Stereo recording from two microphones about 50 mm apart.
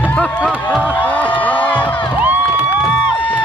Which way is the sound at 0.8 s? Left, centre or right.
Left.